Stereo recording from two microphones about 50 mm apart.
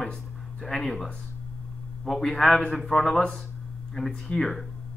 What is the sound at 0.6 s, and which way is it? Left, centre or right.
A man's voice, centre.